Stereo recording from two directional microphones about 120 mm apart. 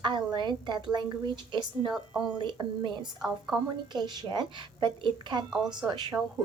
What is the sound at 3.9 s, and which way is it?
Speech, 35° right (ahead or behind).